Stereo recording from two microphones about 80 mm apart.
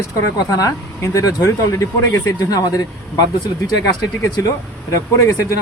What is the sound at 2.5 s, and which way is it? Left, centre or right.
Speech, left.